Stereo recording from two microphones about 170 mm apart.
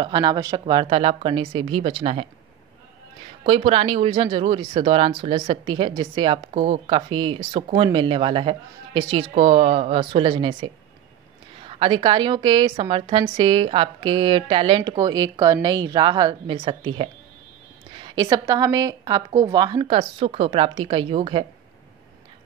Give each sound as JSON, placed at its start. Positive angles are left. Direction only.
{"t": 0.0, "sound": "speech", "side_deg": -25}
{"t": 3.4, "sound": "speech", "side_deg": -35}